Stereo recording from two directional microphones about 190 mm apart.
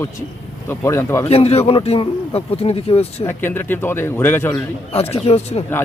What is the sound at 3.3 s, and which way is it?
A man's voice, 10° left (ahead or behind).